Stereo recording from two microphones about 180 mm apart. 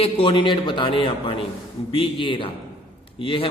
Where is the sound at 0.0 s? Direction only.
30° left (ahead or behind).